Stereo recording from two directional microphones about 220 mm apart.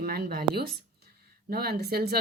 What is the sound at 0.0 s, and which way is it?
Speech, 45° right (ahead or behind).